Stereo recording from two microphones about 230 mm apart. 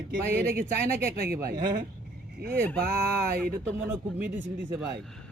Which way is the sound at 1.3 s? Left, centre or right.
Centre.